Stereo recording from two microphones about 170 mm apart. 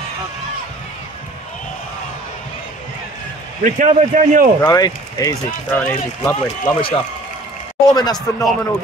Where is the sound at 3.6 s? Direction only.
50° right (ahead or behind).